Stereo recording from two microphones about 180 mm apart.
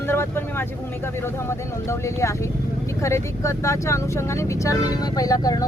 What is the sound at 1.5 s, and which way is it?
Speech, 15° left (ahead or behind).